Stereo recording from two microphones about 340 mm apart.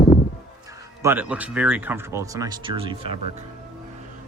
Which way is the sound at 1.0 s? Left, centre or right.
Centre.